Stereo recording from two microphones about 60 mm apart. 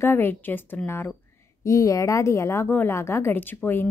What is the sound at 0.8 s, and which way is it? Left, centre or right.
Speech, left.